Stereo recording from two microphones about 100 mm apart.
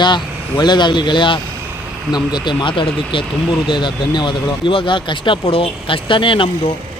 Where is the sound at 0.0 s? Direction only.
50° left (ahead or behind).